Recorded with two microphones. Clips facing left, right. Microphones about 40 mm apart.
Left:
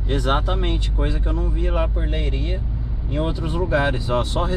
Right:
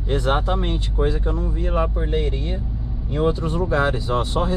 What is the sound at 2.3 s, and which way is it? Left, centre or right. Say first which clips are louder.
Speech: right 1 dB; left.